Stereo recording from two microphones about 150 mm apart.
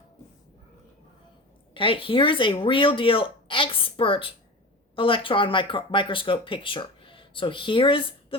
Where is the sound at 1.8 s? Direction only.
35° left (ahead or behind).